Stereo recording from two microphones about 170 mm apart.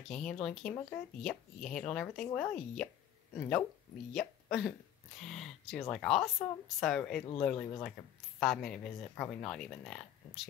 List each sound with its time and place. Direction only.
0.1 s speech: 5° left (ahead or behind)